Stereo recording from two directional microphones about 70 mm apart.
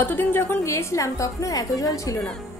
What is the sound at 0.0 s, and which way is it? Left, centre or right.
A woman's voice, left.